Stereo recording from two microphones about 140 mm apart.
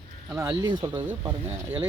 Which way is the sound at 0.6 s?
35° right (ahead or behind).